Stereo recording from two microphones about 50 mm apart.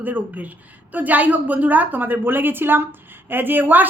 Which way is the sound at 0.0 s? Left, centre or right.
Right.